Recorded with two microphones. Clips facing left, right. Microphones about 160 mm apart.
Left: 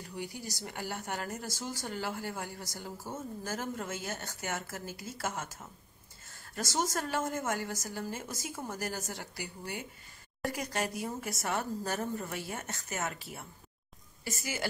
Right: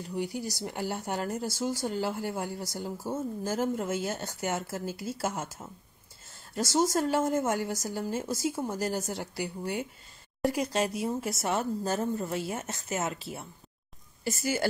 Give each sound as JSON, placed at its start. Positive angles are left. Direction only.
{"t": 0.4, "sound": "a woman's voice", "side_deg": -25}
{"t": 9.4, "sound": "speech", "side_deg": -55}
{"t": 10.7, "sound": "a woman's voice", "side_deg": -20}